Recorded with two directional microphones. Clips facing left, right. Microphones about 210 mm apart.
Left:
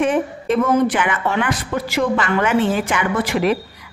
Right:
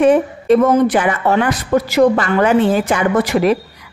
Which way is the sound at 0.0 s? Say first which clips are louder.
Right 6 dB; 35° right (ahead or behind).